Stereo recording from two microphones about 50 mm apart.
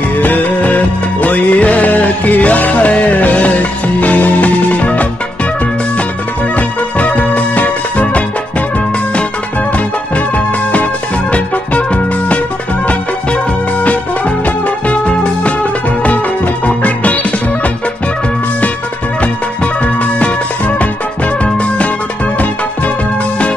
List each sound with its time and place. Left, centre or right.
0.2 s music: left
6.5 s music: left
10.1 s music: left
13.8 s music: left
16.6 s music: left
19.6 s music: left